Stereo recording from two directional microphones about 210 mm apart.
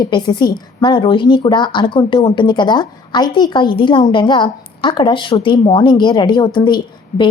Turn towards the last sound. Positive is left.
turn(degrees=20)  # may be behind; listen again after turning